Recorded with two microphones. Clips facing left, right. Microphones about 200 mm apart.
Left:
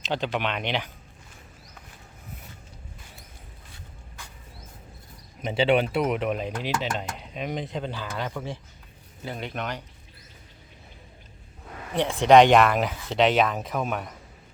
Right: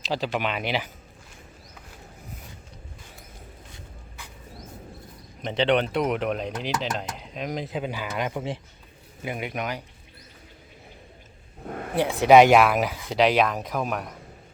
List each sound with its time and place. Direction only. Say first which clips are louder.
0.0 s speech: right 1 dB; centre (ahead or behind)
5.4 s speech: left 1 dB; 5° left (ahead or behind); by 9.8 s 10° right (ahead or behind)
11.6 s vehicle: right 7 dB; 50° right (ahead or behind)
11.9 s speech: right 1 dB; 5° right (ahead or behind)